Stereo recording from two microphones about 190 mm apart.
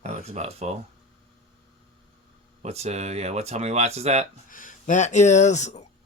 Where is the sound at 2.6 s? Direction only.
35° right (ahead or behind).